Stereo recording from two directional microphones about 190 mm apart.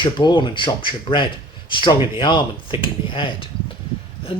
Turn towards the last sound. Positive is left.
turn(degrees=25)  # may be behind; listen again after turning